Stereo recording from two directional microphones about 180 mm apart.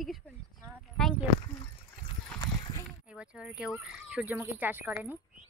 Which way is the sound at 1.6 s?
25° left (ahead or behind).